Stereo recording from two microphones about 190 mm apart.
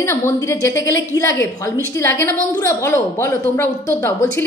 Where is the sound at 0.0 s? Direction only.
15° left (ahead or behind).